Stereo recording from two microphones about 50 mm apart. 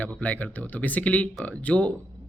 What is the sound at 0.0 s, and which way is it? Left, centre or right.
A man's voice, left.